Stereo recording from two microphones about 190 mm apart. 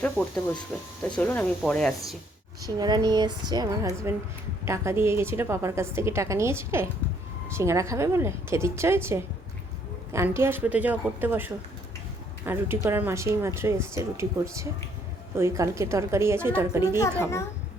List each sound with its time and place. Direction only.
0.0 s speech: 5° left (ahead or behind)
2.6 s a woman's voice: 20° right (ahead or behind)